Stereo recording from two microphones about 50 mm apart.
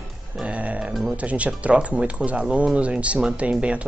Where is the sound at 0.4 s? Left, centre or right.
Right.